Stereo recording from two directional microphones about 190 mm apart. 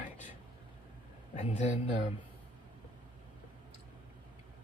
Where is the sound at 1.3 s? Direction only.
40° left (ahead or behind).